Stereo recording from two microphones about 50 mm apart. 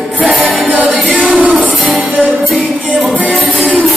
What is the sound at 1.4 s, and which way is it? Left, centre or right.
Music, right.